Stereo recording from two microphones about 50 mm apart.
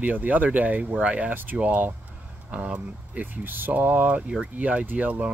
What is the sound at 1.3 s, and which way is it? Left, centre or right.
Speech, right.